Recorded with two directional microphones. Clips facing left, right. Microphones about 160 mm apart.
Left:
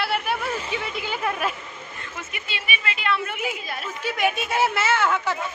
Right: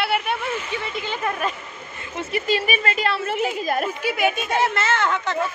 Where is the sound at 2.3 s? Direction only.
40° right (ahead or behind).